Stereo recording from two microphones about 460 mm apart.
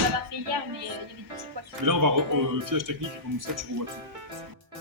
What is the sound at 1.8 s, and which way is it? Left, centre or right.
Speech, right.